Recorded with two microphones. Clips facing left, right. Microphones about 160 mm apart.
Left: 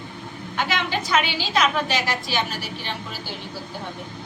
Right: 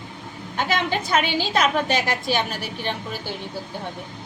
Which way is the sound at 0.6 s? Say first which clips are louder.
Right 2 dB; 50° right (ahead or behind).